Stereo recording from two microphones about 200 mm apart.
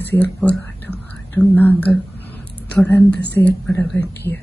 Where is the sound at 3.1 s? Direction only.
55° left (ahead or behind).